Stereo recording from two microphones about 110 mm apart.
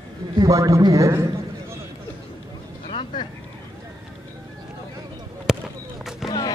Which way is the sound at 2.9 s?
45° left (ahead or behind).